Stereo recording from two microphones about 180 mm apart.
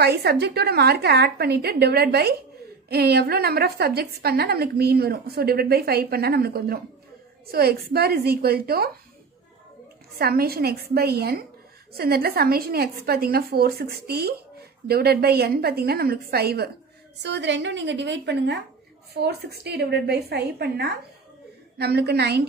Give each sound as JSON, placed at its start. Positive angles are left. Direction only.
{"t": 0.0, "sound": "a woman's voice", "side_deg": -65}
{"t": 10.1, "sound": "a woman's voice", "side_deg": -60}
{"t": 17.2, "sound": "a woman's voice", "side_deg": -75}